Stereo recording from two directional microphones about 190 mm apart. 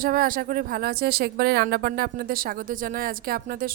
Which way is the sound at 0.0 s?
50° right (ahead or behind).